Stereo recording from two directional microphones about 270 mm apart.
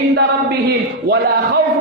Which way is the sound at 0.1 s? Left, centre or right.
Right.